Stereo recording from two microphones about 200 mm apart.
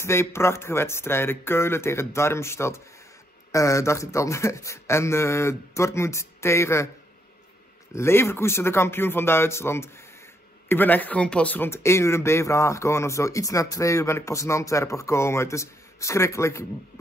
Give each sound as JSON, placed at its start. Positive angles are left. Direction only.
{"t": 0.0, "sound": "speech", "side_deg": 10}
{"t": 7.9, "sound": "speech", "side_deg": 10}